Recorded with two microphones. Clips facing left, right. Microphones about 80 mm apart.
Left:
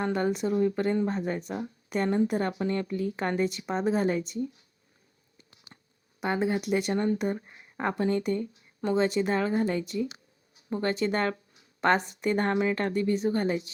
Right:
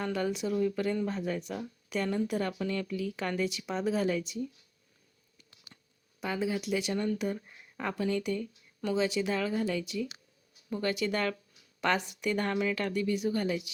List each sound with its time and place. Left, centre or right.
0.0 s speech: left
5.4 s a sound: left
6.3 s speech: left